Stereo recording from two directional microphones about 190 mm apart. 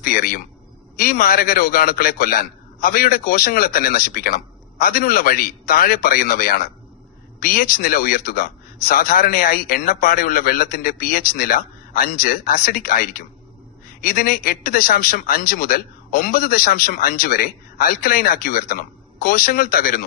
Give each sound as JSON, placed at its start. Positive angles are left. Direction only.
{"t": 0.0, "sound": "a man's voice", "side_deg": 50}